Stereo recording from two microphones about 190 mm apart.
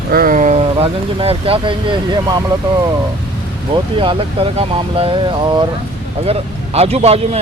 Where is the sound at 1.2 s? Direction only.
30° right (ahead or behind).